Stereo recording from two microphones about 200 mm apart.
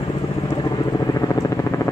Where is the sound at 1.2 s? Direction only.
15° left (ahead or behind).